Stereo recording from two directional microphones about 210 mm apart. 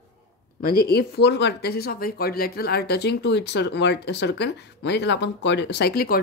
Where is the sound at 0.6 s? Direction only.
50° left (ahead or behind).